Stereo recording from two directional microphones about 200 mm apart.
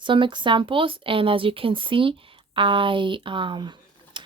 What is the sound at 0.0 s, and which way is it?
Speech, 25° right (ahead or behind).